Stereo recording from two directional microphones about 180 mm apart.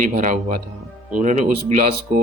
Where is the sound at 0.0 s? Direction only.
45° right (ahead or behind).